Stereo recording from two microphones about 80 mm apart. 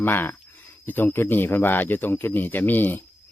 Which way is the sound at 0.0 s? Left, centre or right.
Left.